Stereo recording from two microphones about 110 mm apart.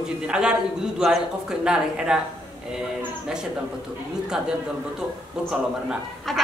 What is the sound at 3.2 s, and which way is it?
Speech, 5° right (ahead or behind).